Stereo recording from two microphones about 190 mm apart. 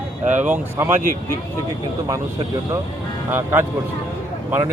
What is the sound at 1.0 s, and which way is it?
Speech, 45° right (ahead or behind).